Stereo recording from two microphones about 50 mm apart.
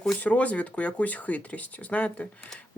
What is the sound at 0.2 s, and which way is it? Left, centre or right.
Speech, left.